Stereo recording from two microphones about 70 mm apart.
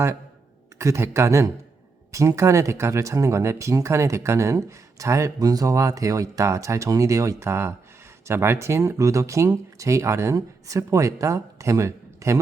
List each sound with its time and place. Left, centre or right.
0.8 s speech: right